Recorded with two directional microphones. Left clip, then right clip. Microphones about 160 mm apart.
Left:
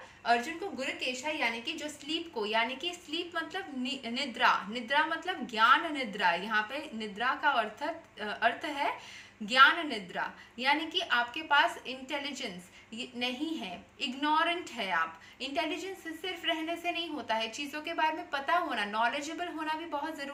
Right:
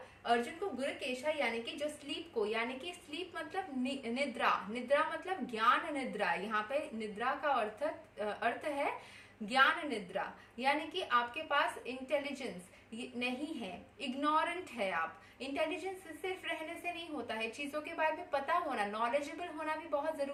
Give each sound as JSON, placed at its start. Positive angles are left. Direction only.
{"t": 0.8, "sound": "a woman's voice", "side_deg": -15}
{"t": 16.8, "sound": "a woman's voice", "side_deg": -20}